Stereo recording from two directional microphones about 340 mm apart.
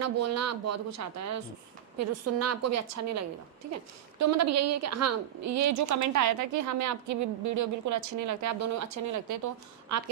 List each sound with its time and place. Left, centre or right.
0.0 s a woman's voice: right